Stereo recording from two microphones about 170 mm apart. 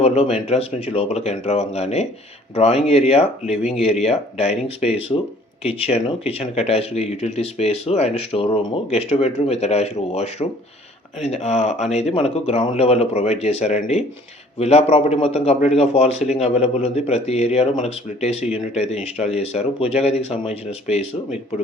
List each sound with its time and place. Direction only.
0.0 s speech: 40° left (ahead or behind)